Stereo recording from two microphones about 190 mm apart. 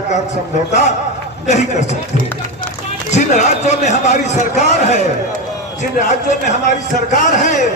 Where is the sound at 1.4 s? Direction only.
40° left (ahead or behind).